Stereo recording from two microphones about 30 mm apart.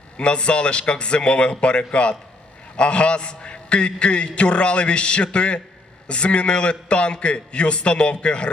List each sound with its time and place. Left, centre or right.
0.2 s a man's voice: left